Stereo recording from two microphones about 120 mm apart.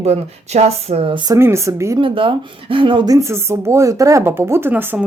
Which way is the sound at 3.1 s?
25° right (ahead or behind).